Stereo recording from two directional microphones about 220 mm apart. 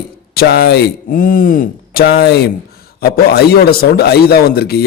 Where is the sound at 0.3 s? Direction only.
45° left (ahead or behind).